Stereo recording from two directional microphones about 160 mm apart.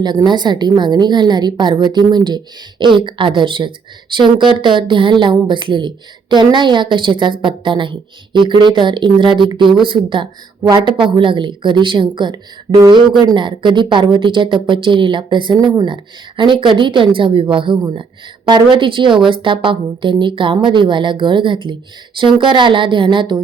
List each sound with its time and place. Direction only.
0.0 s a woman's voice: 25° right (ahead or behind)